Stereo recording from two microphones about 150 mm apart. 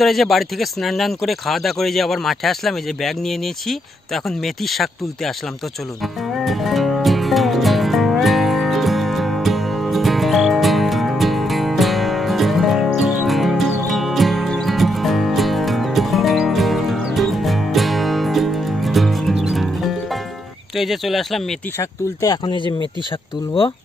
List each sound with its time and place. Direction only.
0.0 s speech: centre (ahead or behind)
6.3 s music: centre (ahead or behind)
20.7 s speech: centre (ahead or behind)
21.7 s speech: 25° left (ahead or behind)